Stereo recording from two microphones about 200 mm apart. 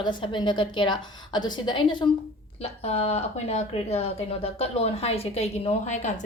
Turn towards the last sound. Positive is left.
turn(degrees=35)  # may be behind; listen again after turning